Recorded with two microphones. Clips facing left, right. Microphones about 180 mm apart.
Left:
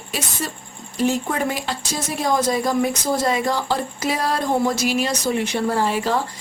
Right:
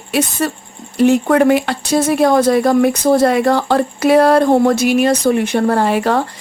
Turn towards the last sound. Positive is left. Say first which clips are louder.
# right 6 dB
turn(degrees=-65)  # may be behind; listen again after turning